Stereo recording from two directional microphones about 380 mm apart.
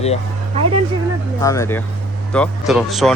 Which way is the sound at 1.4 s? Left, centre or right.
Centre.